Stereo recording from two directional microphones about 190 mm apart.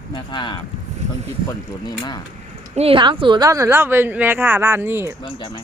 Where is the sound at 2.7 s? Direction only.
30° right (ahead or behind); by 5.1 s 10° right (ahead or behind).